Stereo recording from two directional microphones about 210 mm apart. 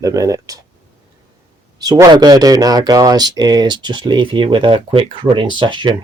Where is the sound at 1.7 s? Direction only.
20° right (ahead or behind).